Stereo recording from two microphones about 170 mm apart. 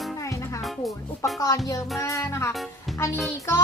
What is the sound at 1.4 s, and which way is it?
Music, 20° left (ahead or behind).